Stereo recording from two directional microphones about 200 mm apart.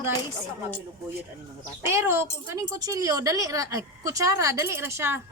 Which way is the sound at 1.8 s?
15° right (ahead or behind).